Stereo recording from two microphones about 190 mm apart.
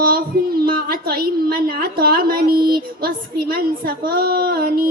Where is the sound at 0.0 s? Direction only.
50° right (ahead or behind).